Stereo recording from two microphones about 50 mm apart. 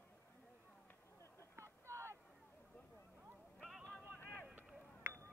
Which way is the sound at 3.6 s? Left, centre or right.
Centre.